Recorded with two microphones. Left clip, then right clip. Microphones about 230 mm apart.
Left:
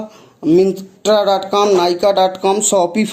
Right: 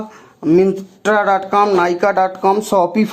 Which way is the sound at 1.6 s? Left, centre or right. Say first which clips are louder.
Left 2 dB; centre.